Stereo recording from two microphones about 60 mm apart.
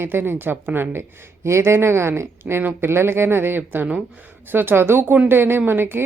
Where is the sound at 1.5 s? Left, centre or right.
Right.